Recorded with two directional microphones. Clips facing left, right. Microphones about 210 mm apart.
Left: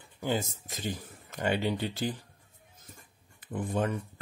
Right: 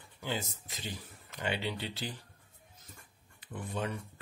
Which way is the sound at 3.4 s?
50° left (ahead or behind).